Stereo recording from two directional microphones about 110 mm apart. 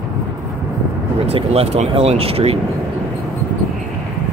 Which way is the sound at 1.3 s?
65° right (ahead or behind).